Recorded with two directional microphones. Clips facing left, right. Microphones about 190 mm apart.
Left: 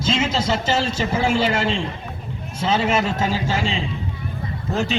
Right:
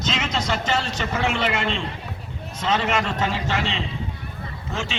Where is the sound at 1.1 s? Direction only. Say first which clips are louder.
Left 3 dB; 10° left (ahead or behind).